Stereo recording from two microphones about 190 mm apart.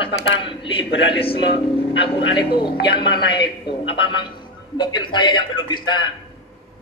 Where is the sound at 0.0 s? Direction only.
25° left (ahead or behind).